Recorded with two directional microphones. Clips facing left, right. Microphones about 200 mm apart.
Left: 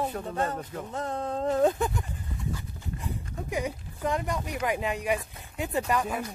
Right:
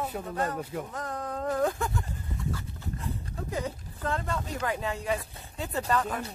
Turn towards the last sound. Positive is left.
turn(degrees=10)  # may be behind; listen again after turning